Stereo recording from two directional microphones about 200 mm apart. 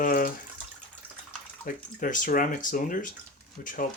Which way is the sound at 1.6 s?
40° left (ahead or behind).